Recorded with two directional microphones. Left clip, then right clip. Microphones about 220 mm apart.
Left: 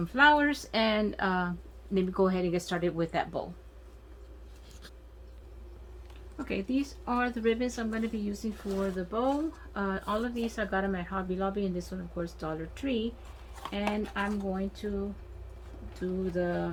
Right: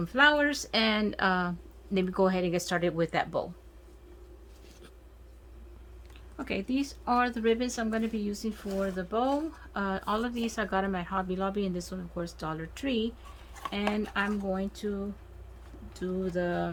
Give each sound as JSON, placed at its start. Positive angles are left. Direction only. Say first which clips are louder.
{"t": 0.0, "sound": "speech", "louder": "left 1 dB", "side_deg": -25}
{"t": 6.3, "sound": "speech", "louder": "even", "side_deg": -35}
{"t": 15.9, "sound": "speech", "louder": "even", "side_deg": -35}